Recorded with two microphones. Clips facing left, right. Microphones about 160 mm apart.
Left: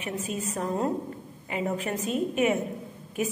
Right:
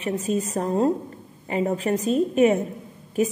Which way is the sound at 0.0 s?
40° right (ahead or behind).